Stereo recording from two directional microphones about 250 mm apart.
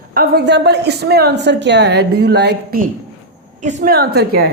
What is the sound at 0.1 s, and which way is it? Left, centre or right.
A woman's voice, right.